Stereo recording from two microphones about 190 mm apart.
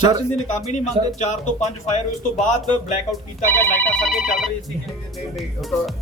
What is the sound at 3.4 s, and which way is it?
Speech, 10° left (ahead or behind).